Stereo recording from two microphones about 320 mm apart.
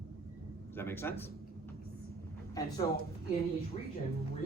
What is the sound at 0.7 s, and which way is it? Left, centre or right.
Speech, centre.